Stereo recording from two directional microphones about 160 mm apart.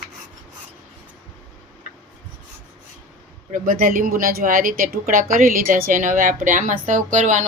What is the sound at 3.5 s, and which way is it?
Speech, 55° right (ahead or behind).